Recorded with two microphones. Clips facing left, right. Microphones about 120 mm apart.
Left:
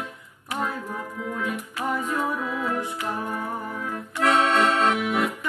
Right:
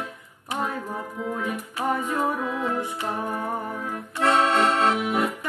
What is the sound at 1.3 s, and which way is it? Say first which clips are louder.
Music: left 1 dB; 35° right (ahead or behind).